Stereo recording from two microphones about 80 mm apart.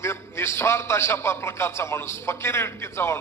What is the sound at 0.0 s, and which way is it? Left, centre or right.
A man's voice, left.